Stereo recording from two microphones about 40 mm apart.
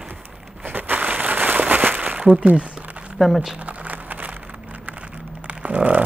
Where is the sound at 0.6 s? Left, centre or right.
Right.